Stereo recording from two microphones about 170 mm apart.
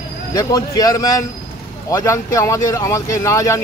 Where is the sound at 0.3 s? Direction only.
20° left (ahead or behind).